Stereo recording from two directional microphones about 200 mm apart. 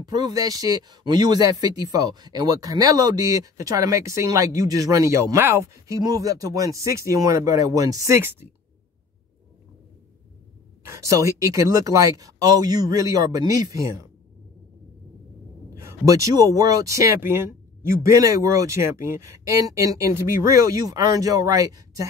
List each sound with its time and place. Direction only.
0.0 s speech: 20° right (ahead or behind)
10.8 s speech: 15° right (ahead or behind)
15.7 s speech: 15° right (ahead or behind)